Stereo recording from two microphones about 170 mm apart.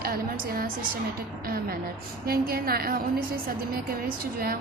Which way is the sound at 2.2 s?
60° right (ahead or behind).